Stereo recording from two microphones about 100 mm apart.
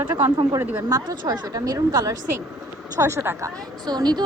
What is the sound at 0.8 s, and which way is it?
Speech, 40° right (ahead or behind).